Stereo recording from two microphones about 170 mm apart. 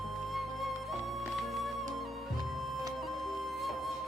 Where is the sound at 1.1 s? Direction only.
Centre (ahead or behind).